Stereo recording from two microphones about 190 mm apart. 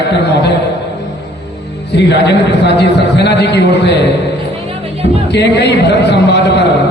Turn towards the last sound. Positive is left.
turn(degrees=65)  # may be behind; listen again after turning